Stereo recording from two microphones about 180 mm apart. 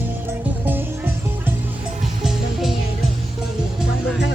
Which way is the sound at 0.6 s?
10° right (ahead or behind).